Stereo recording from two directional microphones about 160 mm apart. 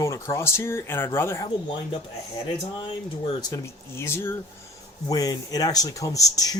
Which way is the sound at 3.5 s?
15° left (ahead or behind).